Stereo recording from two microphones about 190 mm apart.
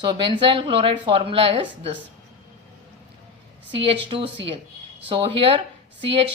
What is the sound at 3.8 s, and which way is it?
A woman's voice, 30° right (ahead or behind).